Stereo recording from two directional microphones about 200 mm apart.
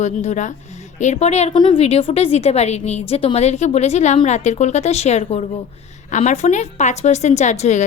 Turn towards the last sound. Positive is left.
turn(degrees=35)  # may be behind; listen again after turning